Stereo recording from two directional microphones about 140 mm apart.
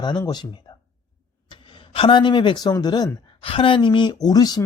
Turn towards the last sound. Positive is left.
turn(degrees=30)  # may be behind; listen again after turning